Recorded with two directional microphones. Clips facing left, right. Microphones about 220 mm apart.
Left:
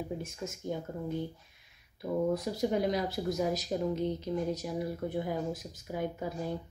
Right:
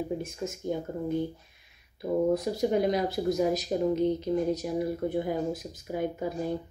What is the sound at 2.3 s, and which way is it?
Speech, 15° right (ahead or behind).